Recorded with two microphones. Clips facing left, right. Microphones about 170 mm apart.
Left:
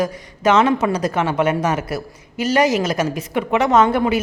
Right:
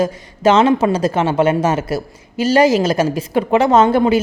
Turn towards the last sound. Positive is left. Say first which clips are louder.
# right 3 dB
turn(degrees=-30)  # may be behind; listen again after turning